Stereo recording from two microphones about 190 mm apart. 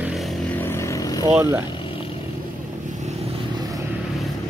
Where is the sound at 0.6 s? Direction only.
15° left (ahead or behind).